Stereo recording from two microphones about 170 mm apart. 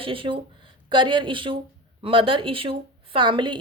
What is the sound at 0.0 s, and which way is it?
A woman's voice, 30° right (ahead or behind).